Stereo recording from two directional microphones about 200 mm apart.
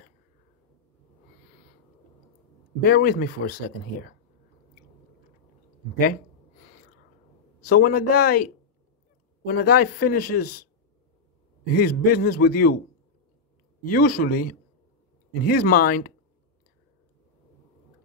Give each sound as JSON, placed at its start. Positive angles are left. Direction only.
{"t": 2.8, "sound": "speech", "side_deg": 45}
{"t": 7.6, "sound": "speech", "side_deg": 45}
{"t": 9.5, "sound": "speech", "side_deg": 50}
{"t": 11.7, "sound": "speech", "side_deg": 45}
{"t": 13.8, "sound": "speech", "side_deg": 50}